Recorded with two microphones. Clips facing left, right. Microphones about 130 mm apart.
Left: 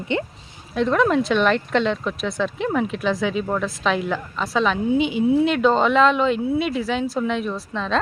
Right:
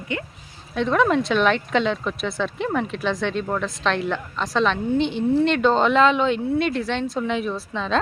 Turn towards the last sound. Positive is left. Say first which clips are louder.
# even
turn(degrees=0)  # may be behind; listen again after turning